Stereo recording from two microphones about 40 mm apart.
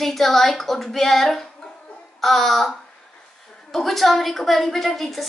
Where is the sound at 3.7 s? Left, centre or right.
Centre.